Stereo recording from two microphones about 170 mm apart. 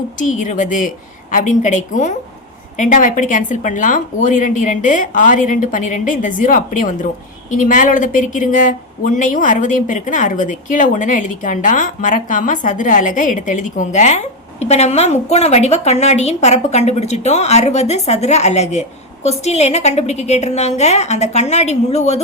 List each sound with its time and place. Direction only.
0.2 s speech: 50° left (ahead or behind)